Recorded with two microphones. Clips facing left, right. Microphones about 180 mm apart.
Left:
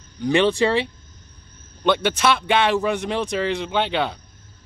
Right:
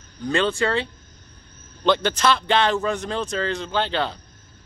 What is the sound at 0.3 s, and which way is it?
Speech, 15° left (ahead or behind).